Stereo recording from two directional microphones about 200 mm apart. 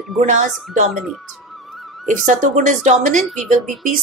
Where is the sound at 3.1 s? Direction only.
Centre (ahead or behind).